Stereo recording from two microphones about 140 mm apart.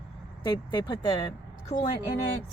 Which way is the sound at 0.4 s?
30° left (ahead or behind).